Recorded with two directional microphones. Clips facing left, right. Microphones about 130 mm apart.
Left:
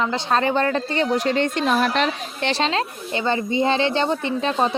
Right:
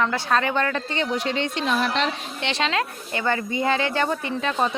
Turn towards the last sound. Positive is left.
turn(degrees=30)  # may be behind; listen again after turning